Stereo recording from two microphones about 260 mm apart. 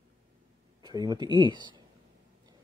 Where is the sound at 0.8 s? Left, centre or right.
Centre.